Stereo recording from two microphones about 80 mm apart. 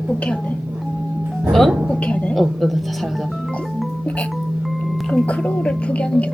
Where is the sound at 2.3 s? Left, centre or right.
Centre.